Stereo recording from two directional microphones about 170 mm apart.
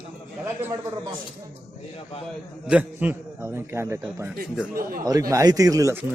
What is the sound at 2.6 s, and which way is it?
A man's voice, 10° right (ahead or behind).